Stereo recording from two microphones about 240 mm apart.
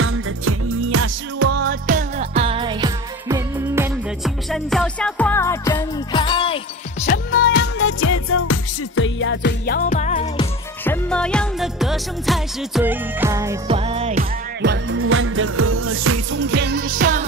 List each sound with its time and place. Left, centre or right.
0.0 s music: right
1.4 s music: right; by 4.3 s centre
4.5 s music: centre; by 7.1 s left
7.1 s music: left
8.0 s music: left
10.8 s music: centre
13.7 s music: right
14.6 s music: right
16.3 s music: right